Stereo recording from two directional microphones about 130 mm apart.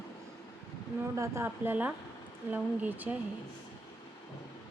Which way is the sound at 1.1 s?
20° right (ahead or behind).